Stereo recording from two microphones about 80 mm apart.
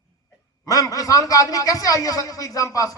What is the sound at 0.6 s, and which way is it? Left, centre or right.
A man's voice, left.